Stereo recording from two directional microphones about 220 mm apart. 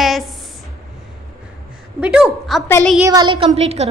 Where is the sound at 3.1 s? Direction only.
20° right (ahead or behind).